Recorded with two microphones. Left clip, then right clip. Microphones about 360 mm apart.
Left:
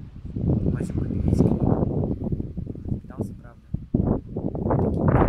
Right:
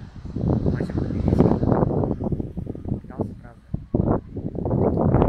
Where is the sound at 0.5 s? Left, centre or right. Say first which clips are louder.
Right 2 dB; right.